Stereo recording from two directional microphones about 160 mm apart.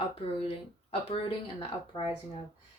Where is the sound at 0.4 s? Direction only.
40° left (ahead or behind).